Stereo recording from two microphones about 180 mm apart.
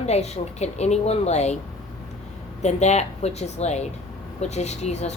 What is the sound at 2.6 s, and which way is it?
A woman's voice, 40° left (ahead or behind).